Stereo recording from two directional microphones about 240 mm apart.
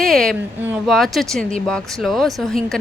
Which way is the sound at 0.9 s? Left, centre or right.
Centre.